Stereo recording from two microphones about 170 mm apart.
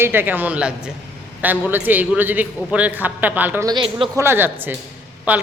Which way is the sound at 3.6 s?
30° right (ahead or behind).